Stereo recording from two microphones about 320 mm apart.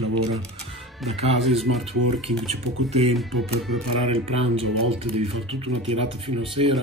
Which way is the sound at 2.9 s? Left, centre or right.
Centre.